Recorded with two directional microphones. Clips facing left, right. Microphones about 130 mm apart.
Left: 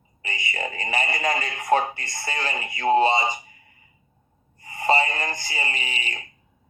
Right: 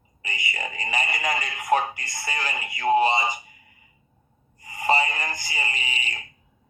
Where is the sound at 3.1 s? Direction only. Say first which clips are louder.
Left 2 dB; 25° left (ahead or behind).